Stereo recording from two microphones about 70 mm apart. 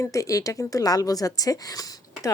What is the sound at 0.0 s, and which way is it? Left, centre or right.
A woman's voice, left.